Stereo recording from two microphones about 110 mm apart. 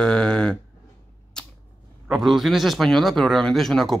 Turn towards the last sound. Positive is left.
turn(degrees=0)  # may be behind; listen again after turning